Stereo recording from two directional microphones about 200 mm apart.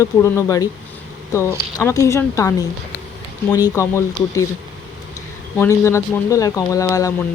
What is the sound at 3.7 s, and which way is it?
Speech, 15° left (ahead or behind).